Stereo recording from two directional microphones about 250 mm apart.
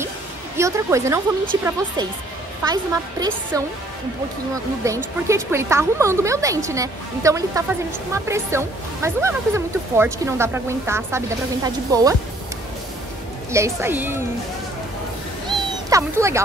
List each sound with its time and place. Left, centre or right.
0.6 s speech: centre
2.6 s speech: centre
4.8 s speech: centre
13.5 s speech: centre
15.9 s speech: centre